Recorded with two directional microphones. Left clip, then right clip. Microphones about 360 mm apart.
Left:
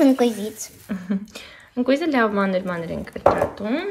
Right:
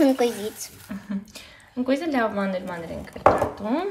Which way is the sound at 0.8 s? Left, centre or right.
Centre.